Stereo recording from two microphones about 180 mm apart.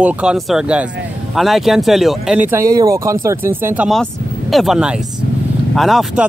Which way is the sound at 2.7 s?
20° right (ahead or behind).